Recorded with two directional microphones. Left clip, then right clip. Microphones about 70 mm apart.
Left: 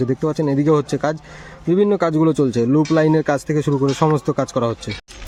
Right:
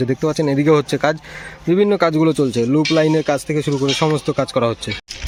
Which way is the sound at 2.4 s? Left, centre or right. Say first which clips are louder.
Even; left.